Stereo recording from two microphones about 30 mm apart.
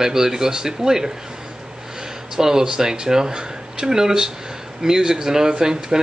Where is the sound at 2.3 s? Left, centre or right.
Centre.